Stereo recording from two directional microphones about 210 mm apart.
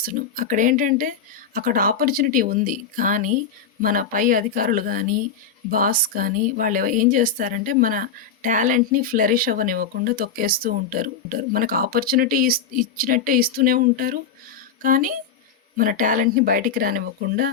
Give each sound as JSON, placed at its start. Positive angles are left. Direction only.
{"t": 0.0, "sound": "speech", "side_deg": -40}